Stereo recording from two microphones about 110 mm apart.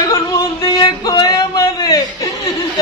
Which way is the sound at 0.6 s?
40° left (ahead or behind).